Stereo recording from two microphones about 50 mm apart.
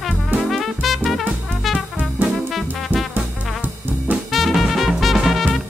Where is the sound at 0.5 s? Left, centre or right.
Centre.